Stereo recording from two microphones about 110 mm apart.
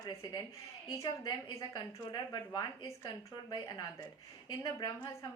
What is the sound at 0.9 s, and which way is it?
A woman's voice, 30° left (ahead or behind).